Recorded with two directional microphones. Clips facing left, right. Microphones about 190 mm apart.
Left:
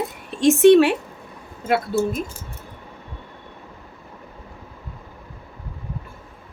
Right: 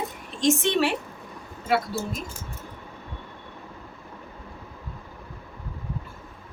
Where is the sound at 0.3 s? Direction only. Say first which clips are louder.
Left 10 dB; 60° left (ahead or behind).